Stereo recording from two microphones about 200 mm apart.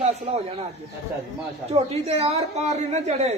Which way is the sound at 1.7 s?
30° right (ahead or behind).